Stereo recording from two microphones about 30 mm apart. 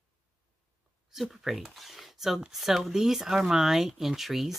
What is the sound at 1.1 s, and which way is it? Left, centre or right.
Speech, centre.